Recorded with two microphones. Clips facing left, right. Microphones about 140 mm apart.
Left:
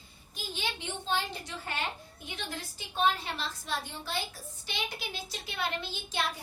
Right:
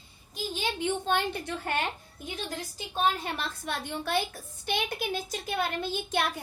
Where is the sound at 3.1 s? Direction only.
55° right (ahead or behind).